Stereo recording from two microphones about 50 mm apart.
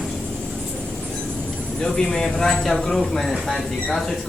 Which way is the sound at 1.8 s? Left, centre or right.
Centre.